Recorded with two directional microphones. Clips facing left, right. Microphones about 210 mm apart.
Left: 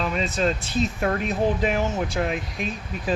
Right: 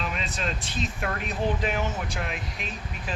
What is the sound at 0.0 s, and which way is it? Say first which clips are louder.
Speech: left 8 dB; 40° left (ahead or behind).